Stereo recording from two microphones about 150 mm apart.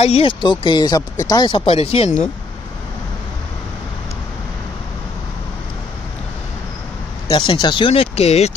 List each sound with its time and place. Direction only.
0.0 s speech: 40° left (ahead or behind)
7.2 s speech: 30° left (ahead or behind)